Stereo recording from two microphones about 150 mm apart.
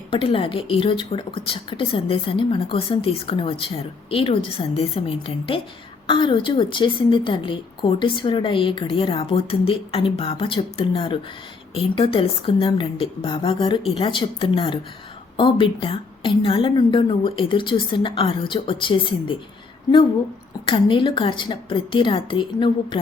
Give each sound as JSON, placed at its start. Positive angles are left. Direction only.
{"t": 0.1, "sound": "a woman's voice", "side_deg": 35}
{"t": 20.7, "sound": "a woman's voice", "side_deg": 35}